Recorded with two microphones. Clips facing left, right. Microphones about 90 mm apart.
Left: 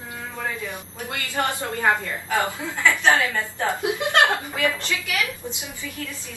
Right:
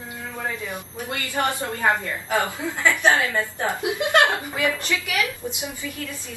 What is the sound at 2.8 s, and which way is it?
A woman's voice, 20° right (ahead or behind).